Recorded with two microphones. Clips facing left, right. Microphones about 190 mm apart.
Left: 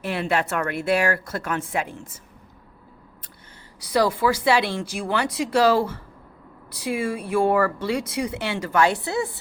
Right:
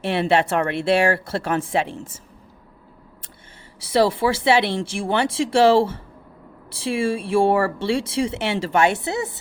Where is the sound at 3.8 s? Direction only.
25° right (ahead or behind).